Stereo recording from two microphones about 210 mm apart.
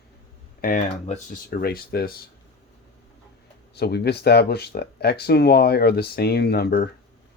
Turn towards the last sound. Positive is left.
turn(degrees=50)  # may be behind; listen again after turning